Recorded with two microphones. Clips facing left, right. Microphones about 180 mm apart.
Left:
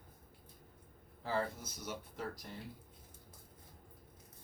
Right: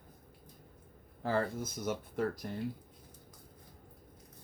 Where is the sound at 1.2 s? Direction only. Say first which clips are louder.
Right 5 dB; 55° right (ahead or behind).